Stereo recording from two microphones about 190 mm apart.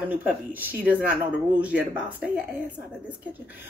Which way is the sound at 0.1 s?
10° right (ahead or behind).